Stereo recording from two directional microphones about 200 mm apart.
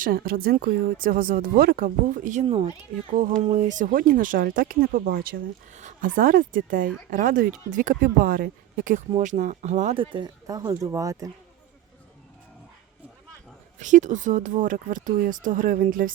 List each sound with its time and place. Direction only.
0.0 s speech: 45° right (ahead or behind); by 2.6 s 30° right (ahead or behind)
3.1 s speech: 40° right (ahead or behind); by 11.3 s 15° right (ahead or behind)
13.7 s speech: 35° right (ahead or behind)